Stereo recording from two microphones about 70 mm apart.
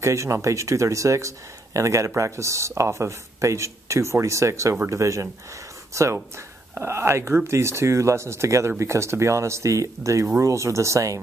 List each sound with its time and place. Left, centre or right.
0.0 s speech: right